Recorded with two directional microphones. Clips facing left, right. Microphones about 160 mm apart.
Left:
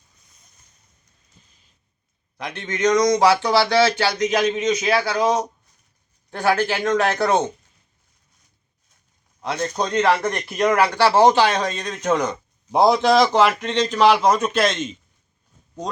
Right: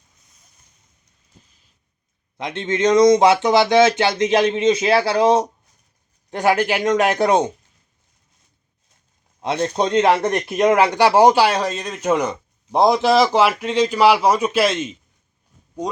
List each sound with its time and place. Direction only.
2.4 s speech: 25° right (ahead or behind)
6.3 s speech: 15° right (ahead or behind)
9.4 s speech: 25° right (ahead or behind)